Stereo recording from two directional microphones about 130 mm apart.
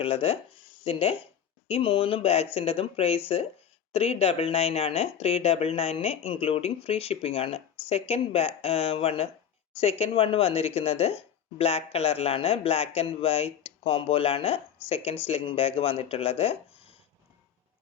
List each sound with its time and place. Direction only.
0.0 s speech: 50° left (ahead or behind)